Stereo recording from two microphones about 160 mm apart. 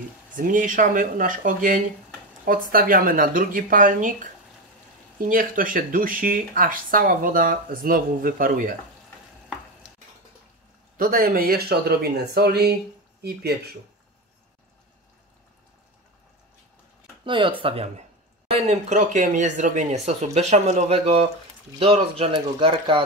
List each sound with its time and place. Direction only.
0.4 s speech: 55° right (ahead or behind)
11.0 s speech: 65° right (ahead or behind); by 13.6 s 85° right
17.2 s speech: 30° right (ahead or behind)